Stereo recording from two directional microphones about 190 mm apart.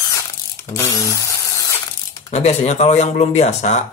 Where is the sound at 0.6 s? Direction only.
15° left (ahead or behind).